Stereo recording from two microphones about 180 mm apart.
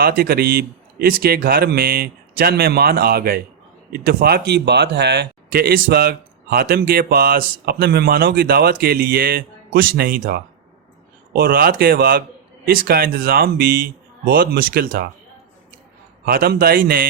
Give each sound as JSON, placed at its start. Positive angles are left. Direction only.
{"t": 0.0, "sound": "speech", "side_deg": -55}
{"t": 16.2, "sound": "speech", "side_deg": -55}